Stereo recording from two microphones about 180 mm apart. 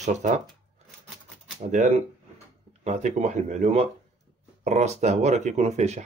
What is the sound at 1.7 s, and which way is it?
Speech, 45° right (ahead or behind).